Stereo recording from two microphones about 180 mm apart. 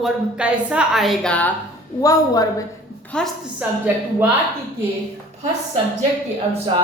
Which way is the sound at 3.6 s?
5° right (ahead or behind).